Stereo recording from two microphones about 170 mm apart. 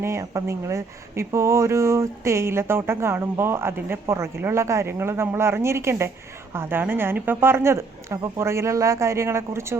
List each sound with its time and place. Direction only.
0.0 s speech: 15° right (ahead or behind)